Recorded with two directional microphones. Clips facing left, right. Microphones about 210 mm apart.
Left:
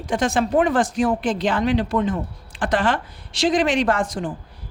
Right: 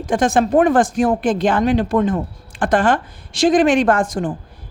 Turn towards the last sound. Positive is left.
turn(degrees=-50)  # may be behind; listen again after turning